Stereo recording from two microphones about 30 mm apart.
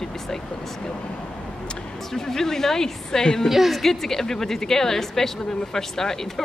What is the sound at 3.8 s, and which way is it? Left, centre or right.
Speech, centre.